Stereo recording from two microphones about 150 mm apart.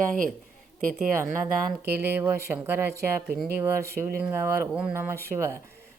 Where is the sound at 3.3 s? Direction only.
85° right.